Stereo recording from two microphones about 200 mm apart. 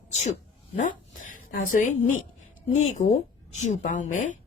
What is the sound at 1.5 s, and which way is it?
Speech, 40° left (ahead or behind).